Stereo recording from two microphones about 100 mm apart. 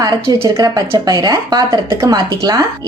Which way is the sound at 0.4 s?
40° right (ahead or behind).